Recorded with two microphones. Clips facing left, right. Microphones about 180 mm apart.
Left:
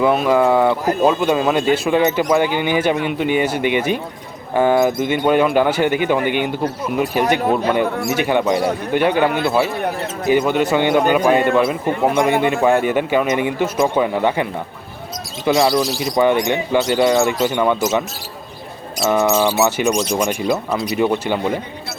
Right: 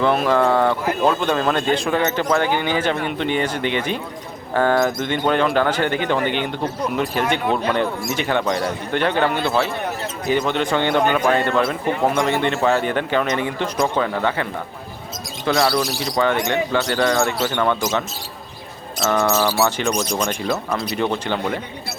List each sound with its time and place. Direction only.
0.0 s speech: 5° left (ahead or behind)
15.4 s speech: 15° left (ahead or behind)
19.0 s speech: 15° left (ahead or behind)
19.7 s speech: 10° left (ahead or behind)